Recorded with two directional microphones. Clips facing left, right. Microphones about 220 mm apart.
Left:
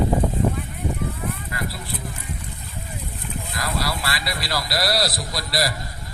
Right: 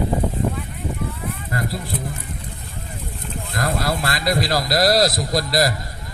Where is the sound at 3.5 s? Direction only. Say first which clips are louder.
Right 5 dB; 50° right (ahead or behind).